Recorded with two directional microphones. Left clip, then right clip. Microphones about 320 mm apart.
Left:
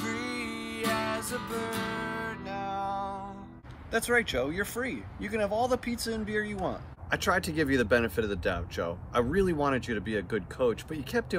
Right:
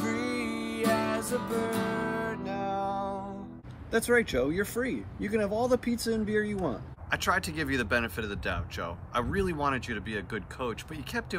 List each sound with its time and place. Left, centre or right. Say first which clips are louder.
0.0 s music: right 2 dB; centre
3.9 s speech: right 1 dB; centre